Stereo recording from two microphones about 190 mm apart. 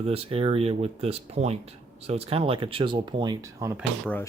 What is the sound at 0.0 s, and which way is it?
Speech, 30° right (ahead or behind).